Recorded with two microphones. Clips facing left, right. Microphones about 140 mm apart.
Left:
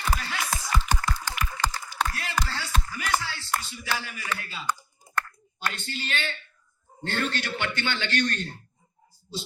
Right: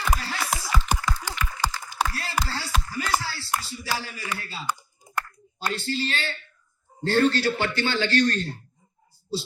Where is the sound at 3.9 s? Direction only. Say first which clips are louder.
Right 1 dB; 35° right (ahead or behind).